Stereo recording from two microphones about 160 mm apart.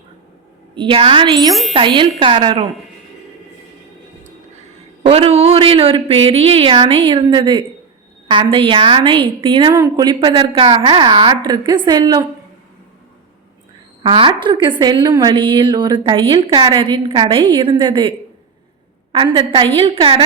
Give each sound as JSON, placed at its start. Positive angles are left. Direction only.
{"t": 0.8, "sound": "a woman's voice", "side_deg": -30}
{"t": 5.0, "sound": "a woman's voice", "side_deg": -35}
{"t": 14.0, "sound": "a woman's voice", "side_deg": -30}
{"t": 19.1, "sound": "a woman's voice", "side_deg": -35}